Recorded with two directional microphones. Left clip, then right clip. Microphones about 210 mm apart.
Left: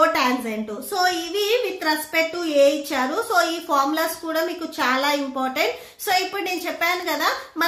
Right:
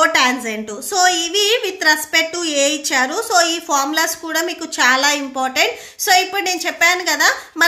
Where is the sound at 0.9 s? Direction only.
30° right (ahead or behind).